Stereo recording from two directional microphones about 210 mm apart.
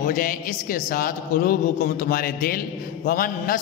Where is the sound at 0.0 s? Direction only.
40° left (ahead or behind).